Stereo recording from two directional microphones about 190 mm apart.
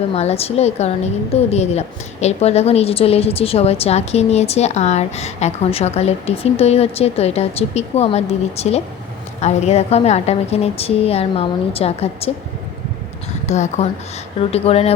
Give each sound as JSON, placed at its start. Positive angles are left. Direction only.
{"t": 0.1, "sound": "a woman's voice", "side_deg": 35}
{"t": 13.5, "sound": "a woman's voice", "side_deg": 35}